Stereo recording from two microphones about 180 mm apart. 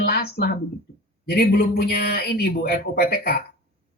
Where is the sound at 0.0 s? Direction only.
60° left (ahead or behind).